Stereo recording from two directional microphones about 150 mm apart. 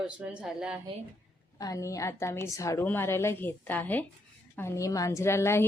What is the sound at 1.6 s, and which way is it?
A woman's voice, 25° left (ahead or behind).